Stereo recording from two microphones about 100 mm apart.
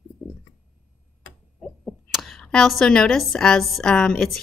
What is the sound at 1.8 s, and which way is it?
Speech, centre (ahead or behind).